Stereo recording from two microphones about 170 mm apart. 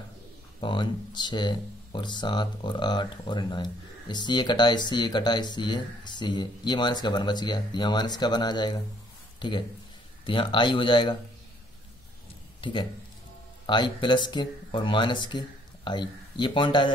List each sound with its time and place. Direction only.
0.6 s speech: 30° left (ahead or behind)
13.7 s speech: 25° left (ahead or behind)